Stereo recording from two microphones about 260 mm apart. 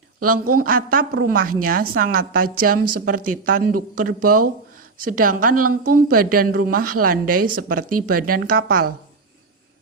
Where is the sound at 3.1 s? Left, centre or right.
Right.